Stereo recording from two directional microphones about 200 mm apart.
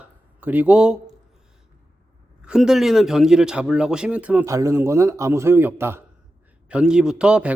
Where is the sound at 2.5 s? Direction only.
5° right (ahead or behind).